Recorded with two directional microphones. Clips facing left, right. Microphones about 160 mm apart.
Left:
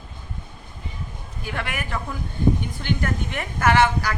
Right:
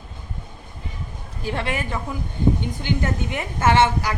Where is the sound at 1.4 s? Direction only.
30° right (ahead or behind).